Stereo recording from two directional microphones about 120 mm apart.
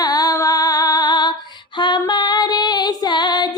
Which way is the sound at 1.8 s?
40° left (ahead or behind).